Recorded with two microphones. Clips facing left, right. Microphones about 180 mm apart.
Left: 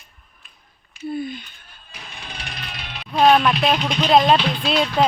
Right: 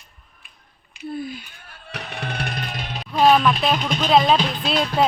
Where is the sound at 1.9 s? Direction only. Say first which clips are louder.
Right 9 dB; 70° right (ahead or behind); by 3.1 s 45° right (ahead or behind).